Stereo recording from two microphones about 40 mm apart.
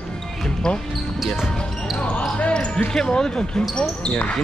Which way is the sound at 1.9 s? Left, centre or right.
Left.